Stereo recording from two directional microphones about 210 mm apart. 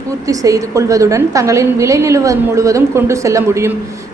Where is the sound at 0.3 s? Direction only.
15° right (ahead or behind).